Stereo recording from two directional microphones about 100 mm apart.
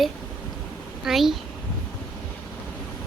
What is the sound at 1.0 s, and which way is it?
Speech, 5° right (ahead or behind).